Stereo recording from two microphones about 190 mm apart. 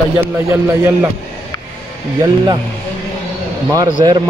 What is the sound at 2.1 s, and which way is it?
Speech, 20° right (ahead or behind).